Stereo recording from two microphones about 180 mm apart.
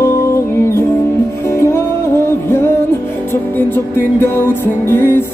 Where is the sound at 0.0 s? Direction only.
15° left (ahead or behind).